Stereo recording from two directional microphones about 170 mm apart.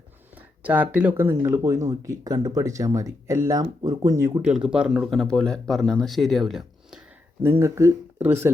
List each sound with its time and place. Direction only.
0.3 s speech: 10° right (ahead or behind)
4.4 s speech: 5° right (ahead or behind)
7.4 s speech: 15° right (ahead or behind)